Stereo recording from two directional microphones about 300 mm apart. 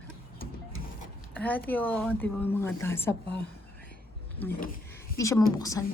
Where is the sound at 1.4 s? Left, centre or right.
Centre.